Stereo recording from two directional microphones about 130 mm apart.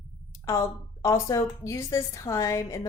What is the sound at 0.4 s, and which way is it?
A woman's voice, 25° left (ahead or behind).